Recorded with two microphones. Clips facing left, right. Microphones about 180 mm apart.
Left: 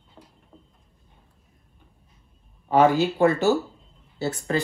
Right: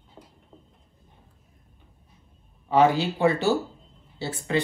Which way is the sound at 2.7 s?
50° left (ahead or behind).